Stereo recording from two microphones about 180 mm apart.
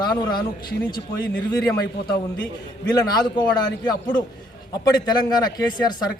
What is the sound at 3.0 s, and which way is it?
Speech, 25° left (ahead or behind).